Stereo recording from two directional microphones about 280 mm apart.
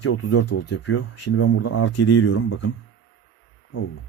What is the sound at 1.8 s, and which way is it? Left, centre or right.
Speech, left.